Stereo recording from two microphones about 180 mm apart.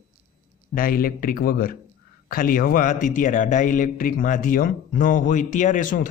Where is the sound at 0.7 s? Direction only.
55° left (ahead or behind).